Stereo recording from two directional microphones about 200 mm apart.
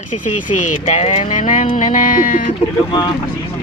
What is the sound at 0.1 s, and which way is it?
Speech, 40° left (ahead or behind).